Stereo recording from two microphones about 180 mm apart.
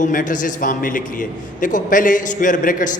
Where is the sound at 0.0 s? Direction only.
50° left (ahead or behind).